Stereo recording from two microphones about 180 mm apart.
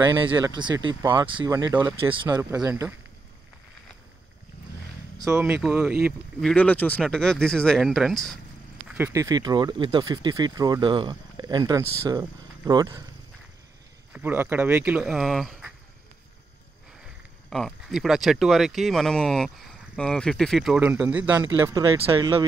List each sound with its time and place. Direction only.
0.0 s speech: 25° right (ahead or behind)
1.5 s speech: 15° right (ahead or behind)
2.3 s speech: 20° right (ahead or behind)
5.2 s speech: 10° right (ahead or behind)
14.1 s speech: 10° right (ahead or behind)
17.5 s speech: centre (ahead or behind)
20.8 s speech: 10° right (ahead or behind)